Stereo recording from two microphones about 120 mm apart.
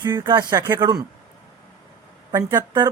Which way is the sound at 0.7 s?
35° right (ahead or behind).